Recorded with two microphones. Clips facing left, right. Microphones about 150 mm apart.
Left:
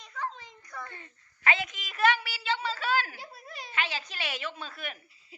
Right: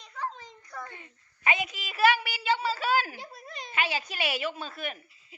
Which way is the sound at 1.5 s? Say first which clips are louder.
Even; 15° right (ahead or behind).